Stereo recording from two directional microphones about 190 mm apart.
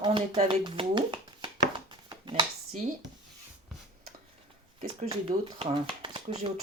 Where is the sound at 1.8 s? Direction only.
25° right (ahead or behind).